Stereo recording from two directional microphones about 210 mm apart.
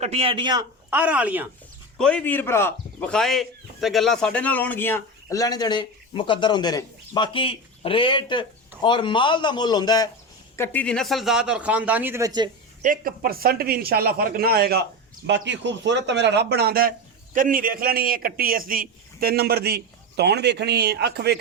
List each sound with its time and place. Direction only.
0.0 s a man's voice: 30° right (ahead or behind)
0.9 s speech: 5° right (ahead or behind)
2.0 s a man's voice: 5° left (ahead or behind); by 12.5 s 20° right (ahead or behind)
12.8 s a man's voice: 40° right (ahead or behind)